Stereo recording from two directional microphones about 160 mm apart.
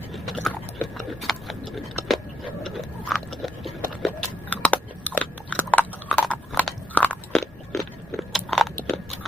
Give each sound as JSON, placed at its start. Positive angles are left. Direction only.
{"t": 0.1, "sound": "a sound", "side_deg": 0}
{"t": 2.6, "sound": "biting", "side_deg": 0}
{"t": 8.3, "sound": "crunch", "side_deg": 0}